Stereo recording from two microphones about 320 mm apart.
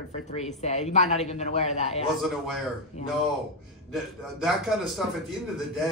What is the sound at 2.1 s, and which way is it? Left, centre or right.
Speech, centre.